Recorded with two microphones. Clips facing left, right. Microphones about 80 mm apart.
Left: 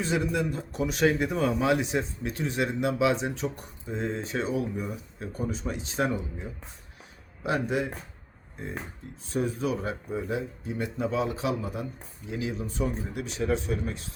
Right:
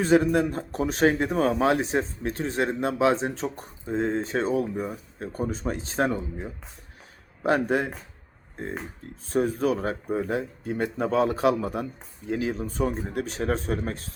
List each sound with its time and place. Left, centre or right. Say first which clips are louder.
0.0 s speech: right 7 dB; right
9.3 s speech: right 5 dB; right
12.3 s speech: right 5 dB; right